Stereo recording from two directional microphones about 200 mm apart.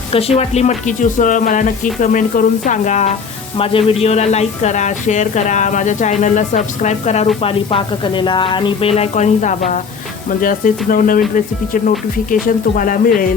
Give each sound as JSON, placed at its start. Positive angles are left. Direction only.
{"t": 0.1, "sound": "speech", "side_deg": 30}
{"t": 12.3, "sound": "speech", "side_deg": 45}